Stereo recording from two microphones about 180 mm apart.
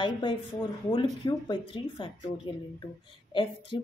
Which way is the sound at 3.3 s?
25° left (ahead or behind).